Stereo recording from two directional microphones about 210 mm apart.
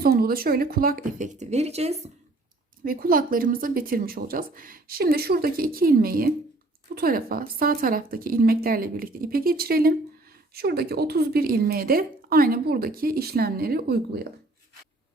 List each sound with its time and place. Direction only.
0.0 s speech: 45° right (ahead or behind); by 2.0 s 30° right (ahead or behind)
2.8 s speech: 45° right (ahead or behind)